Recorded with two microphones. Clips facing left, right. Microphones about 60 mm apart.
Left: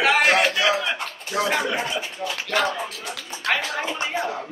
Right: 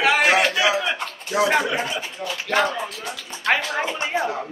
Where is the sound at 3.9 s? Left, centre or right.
Centre.